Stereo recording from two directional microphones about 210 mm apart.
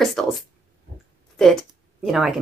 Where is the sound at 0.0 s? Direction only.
Centre (ahead or behind).